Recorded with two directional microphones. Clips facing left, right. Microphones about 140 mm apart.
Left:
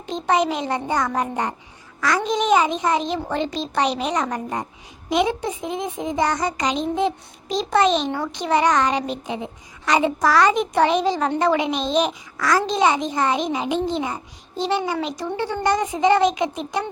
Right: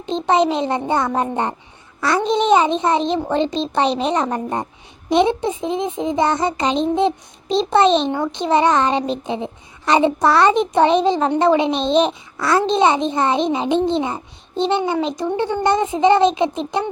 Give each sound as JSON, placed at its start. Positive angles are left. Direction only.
{"t": 0.0, "sound": "a child's voice", "side_deg": -25}